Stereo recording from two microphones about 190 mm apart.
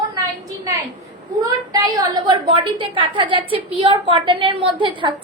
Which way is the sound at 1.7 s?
20° right (ahead or behind).